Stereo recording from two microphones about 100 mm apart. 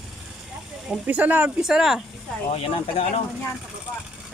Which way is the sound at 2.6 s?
90° left.